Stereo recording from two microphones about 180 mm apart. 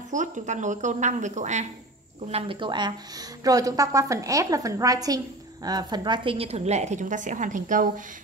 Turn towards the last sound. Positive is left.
turn(degrees=-45)  # may be behind; listen again after turning